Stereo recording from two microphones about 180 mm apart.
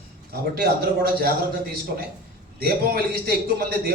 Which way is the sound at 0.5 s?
60° right (ahead or behind).